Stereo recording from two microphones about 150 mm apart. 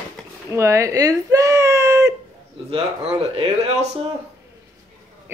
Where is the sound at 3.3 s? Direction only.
45° right (ahead or behind).